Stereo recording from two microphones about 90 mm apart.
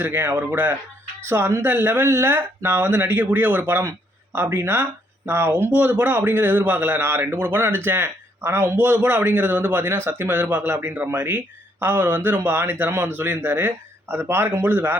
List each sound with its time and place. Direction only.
0.0 s speech: 25° right (ahead or behind)